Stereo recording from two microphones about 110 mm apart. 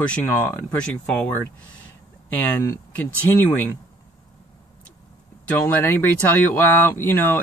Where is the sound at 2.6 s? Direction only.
30° left (ahead or behind).